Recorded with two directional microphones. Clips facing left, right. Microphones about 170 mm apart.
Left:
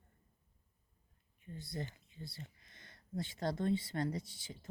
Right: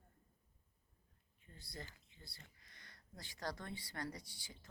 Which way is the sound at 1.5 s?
20° left (ahead or behind).